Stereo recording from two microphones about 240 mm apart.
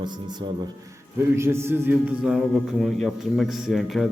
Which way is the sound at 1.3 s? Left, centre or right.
Centre.